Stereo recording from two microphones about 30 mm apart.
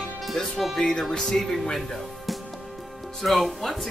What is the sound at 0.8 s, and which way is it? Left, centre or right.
Speech, centre.